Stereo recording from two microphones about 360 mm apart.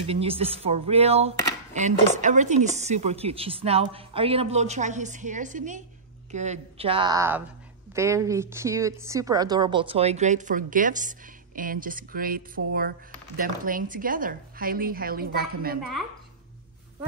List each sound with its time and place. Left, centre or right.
0.0 s a woman's voice: centre